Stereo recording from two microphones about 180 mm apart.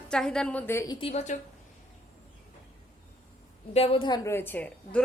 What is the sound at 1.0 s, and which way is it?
Speech, 35° left (ahead or behind).